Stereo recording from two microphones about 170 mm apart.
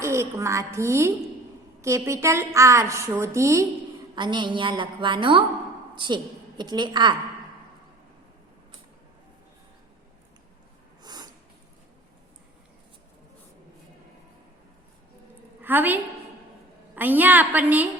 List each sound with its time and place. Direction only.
0.0 s a woman's voice: 15° right (ahead or behind)
11.0 s snort: 25° right (ahead or behind)
15.6 s a woman's voice: 10° right (ahead or behind)